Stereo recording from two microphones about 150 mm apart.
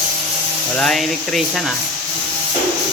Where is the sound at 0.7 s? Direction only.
Centre (ahead or behind).